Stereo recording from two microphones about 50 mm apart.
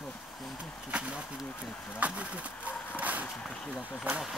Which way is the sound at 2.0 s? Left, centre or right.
Right.